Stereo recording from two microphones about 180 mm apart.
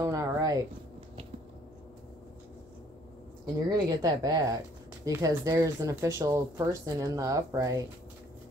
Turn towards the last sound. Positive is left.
turn(degrees=-20)  # may be behind; listen again after turning